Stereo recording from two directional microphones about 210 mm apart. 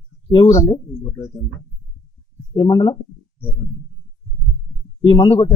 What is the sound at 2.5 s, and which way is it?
Speech, 20° left (ahead or behind).